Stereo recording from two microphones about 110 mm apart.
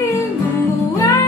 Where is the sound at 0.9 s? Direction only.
25° left (ahead or behind).